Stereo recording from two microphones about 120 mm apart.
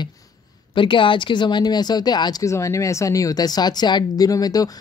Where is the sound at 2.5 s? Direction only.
25° left (ahead or behind).